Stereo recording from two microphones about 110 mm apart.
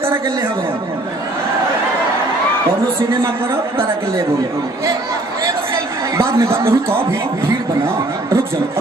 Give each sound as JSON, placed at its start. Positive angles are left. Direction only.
{"t": 6.1, "sound": "speech", "side_deg": -25}